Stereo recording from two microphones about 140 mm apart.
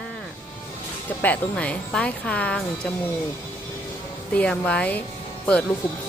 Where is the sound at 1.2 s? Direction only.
10° left (ahead or behind).